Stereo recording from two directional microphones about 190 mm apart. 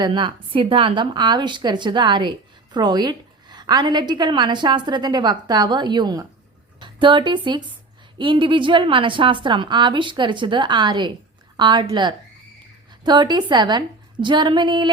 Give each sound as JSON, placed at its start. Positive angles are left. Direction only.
{"t": 0.0, "sound": "a woman's voice", "side_deg": -25}